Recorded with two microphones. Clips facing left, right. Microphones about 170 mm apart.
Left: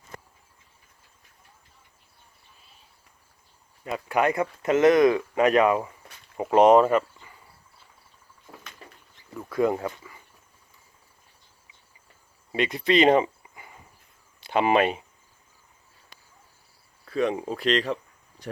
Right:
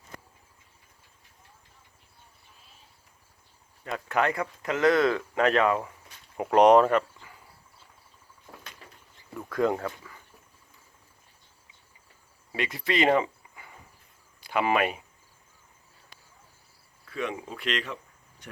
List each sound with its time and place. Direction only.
3.8 s speech: 10° left (ahead or behind)
6.3 s speech: 5° left (ahead or behind)
9.3 s a sound: 5° left (ahead or behind)
12.5 s speech: 20° left (ahead or behind)
17.1 s speech: 35° left (ahead or behind)
18.4 s a sound: 35° left (ahead or behind)